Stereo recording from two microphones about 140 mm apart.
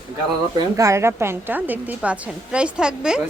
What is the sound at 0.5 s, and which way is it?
Speech, 25° right (ahead or behind).